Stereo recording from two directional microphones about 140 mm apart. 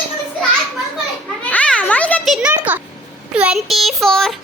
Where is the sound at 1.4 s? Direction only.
10° left (ahead or behind).